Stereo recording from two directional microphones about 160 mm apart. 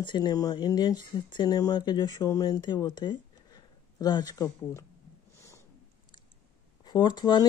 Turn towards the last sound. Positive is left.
turn(degrees=30)  # may be behind; listen again after turning